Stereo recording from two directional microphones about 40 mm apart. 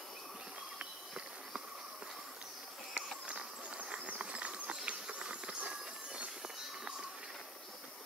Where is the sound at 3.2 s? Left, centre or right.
Right.